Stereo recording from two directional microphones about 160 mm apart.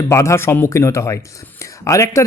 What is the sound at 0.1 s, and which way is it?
Speech, 20° left (ahead or behind).